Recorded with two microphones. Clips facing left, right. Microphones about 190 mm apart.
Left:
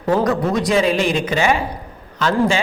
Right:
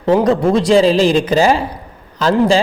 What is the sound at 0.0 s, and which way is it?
Speech, 25° right (ahead or behind).